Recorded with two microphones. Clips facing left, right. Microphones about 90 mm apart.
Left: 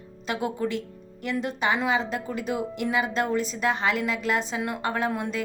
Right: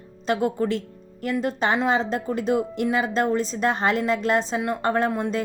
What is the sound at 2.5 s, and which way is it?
A woman's voice, 30° right (ahead or behind).